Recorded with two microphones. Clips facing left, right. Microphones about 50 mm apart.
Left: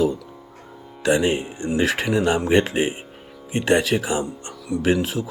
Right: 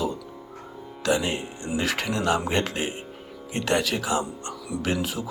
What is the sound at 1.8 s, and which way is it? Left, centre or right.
Speech, centre.